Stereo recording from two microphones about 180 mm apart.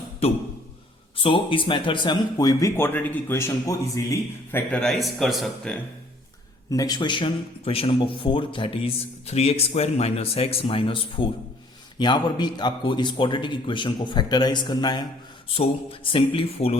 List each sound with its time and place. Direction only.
1.1 s speech: 30° left (ahead or behind); by 5.7 s centre (ahead or behind)
6.7 s a man's voice: 20° left (ahead or behind)